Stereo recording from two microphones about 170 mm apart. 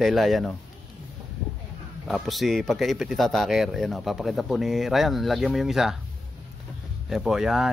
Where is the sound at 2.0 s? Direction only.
Centre (ahead or behind).